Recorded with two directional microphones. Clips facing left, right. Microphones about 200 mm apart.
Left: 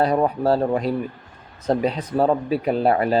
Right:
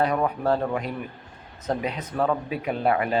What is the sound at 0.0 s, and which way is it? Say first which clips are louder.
Speech: left 4 dB; 35° left (ahead or behind).